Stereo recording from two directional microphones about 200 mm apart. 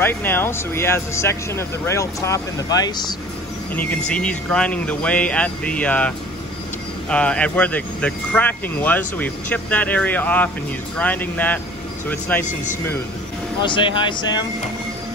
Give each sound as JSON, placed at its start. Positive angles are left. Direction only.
{"t": 0.0, "sound": "speech", "side_deg": 10}
{"t": 3.7, "sound": "speech", "side_deg": 5}
{"t": 13.6, "sound": "speech", "side_deg": 25}